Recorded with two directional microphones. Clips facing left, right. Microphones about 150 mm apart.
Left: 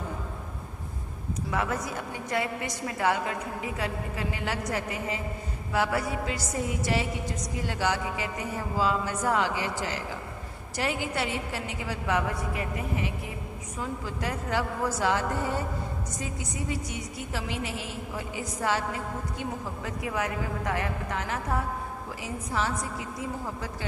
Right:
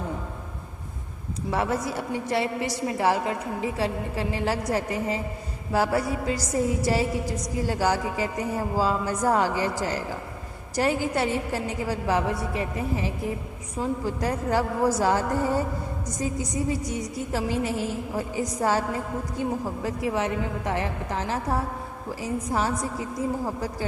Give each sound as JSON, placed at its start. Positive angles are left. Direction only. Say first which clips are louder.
{"t": 1.5, "sound": "a woman's voice", "louder": "right 5 dB", "side_deg": -30}